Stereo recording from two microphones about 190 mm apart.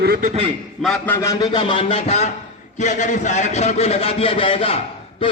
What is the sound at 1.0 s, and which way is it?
A man's voice, 15° left (ahead or behind).